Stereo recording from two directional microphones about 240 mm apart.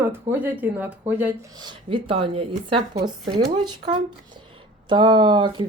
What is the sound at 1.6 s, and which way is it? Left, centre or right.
Speech, right.